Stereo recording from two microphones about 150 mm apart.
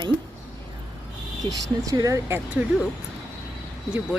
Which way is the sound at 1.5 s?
25° right (ahead or behind).